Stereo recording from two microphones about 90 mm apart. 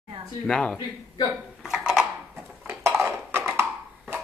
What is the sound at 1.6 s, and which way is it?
Dishes, 5° right (ahead or behind).